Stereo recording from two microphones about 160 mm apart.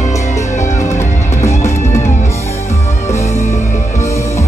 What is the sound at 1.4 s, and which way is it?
Music, 20° left (ahead or behind).